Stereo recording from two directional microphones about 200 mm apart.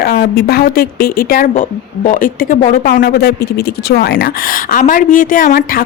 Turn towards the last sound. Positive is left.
turn(degrees=45)  # may be behind; listen again after turning